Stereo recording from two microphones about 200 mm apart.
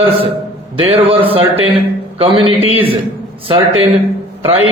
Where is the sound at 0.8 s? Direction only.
25° right (ahead or behind).